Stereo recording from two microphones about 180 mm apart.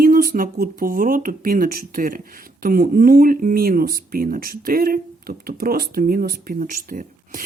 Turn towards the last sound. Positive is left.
turn(degrees=-45)  # may be behind; listen again after turning